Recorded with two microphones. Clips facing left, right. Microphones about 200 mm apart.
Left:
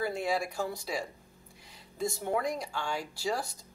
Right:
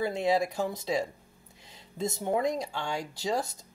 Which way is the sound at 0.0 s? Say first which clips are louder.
Right 4 dB; 20° right (ahead or behind).